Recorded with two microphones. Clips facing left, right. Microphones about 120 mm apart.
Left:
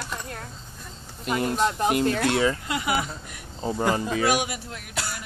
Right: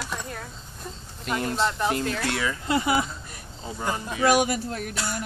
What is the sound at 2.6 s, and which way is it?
Speech, 30° right (ahead or behind).